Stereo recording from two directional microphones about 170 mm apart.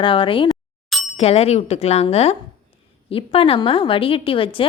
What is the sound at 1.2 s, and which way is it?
A woman's voice, 40° left (ahead or behind).